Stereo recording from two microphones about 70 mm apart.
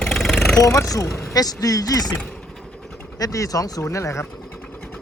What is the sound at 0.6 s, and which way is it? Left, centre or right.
Speech, left.